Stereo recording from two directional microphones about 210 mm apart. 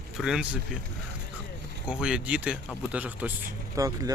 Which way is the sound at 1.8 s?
5° right (ahead or behind).